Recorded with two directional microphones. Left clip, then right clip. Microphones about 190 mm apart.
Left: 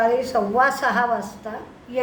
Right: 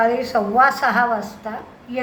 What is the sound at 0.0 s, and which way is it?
A woman's voice, 15° left (ahead or behind).